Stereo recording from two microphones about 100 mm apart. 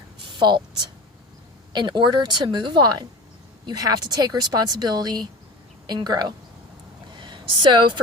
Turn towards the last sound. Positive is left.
turn(degrees=-50)  # may be behind; listen again after turning